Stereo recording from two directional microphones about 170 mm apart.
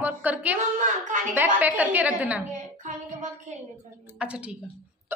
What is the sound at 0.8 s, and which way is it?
Speech, 50° right (ahead or behind).